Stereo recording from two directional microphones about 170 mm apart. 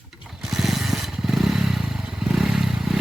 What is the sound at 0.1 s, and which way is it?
Motorcycle, 5° right (ahead or behind).